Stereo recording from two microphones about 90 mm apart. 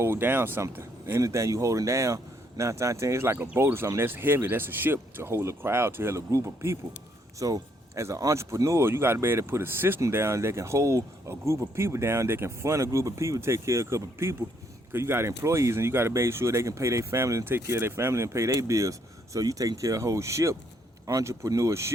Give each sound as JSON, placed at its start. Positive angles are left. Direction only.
{"t": 0.0, "sound": "speech", "side_deg": -25}